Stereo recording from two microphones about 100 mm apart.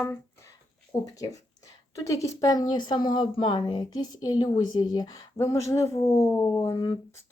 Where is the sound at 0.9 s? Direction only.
25° left (ahead or behind); by 5.2 s 40° left (ahead or behind).